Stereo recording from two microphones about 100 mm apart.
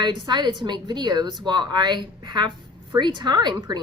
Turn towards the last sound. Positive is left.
turn(degrees=-45)  # may be behind; listen again after turning